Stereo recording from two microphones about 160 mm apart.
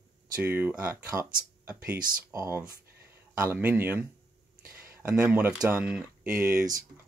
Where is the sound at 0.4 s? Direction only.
10° right (ahead or behind).